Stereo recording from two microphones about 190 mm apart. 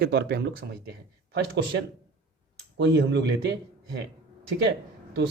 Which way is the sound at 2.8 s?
70° right (ahead or behind).